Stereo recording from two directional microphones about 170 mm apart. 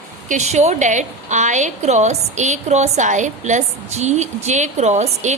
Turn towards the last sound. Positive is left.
turn(degrees=-40)  # may be behind; listen again after turning